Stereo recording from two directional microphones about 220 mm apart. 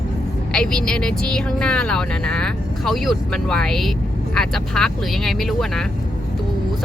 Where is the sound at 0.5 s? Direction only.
5° left (ahead or behind).